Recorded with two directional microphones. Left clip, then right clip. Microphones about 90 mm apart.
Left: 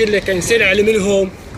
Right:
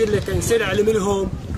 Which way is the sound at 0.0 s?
50° right (ahead or behind).